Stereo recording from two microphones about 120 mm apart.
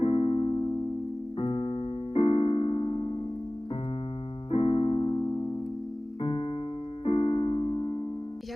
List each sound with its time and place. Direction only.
0.0 s keyboard: 50° left (ahead or behind)
1.4 s piano: 50° left (ahead or behind)
4.5 s keyboard: 50° left (ahead or behind)